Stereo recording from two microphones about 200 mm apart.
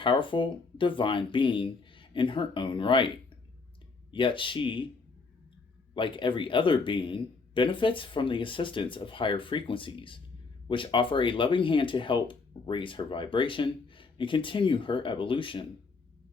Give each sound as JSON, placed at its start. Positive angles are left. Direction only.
{"t": 0.0, "sound": "speech", "side_deg": 25}
{"t": 4.1, "sound": "speech", "side_deg": 25}
{"t": 5.9, "sound": "speech", "side_deg": 25}